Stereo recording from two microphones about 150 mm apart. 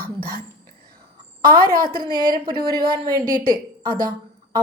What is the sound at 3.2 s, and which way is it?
Speech, 70° right (ahead or behind).